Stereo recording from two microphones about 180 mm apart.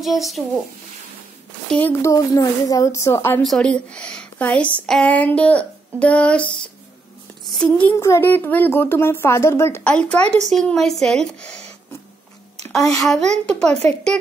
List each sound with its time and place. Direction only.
0.0 s a woman's voice: centre (ahead or behind)
1.7 s a woman's voice: 10° left (ahead or behind)
7.4 s a woman's voice: 5° left (ahead or behind)
12.7 s a woman's voice: centre (ahead or behind)